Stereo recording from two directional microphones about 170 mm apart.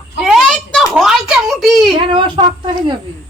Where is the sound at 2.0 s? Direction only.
30° right (ahead or behind).